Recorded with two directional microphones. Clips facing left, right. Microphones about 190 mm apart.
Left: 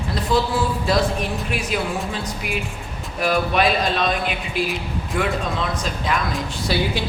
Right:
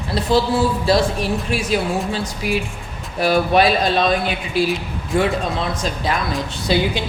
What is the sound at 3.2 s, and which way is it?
Speech, 35° right (ahead or behind).